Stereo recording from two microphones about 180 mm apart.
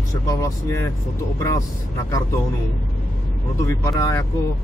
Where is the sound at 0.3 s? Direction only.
15° left (ahead or behind).